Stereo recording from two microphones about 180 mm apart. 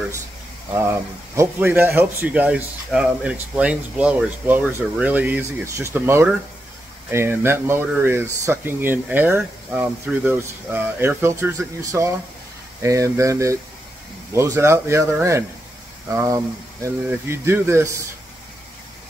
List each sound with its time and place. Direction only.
0.7 s speech: 15° right (ahead or behind)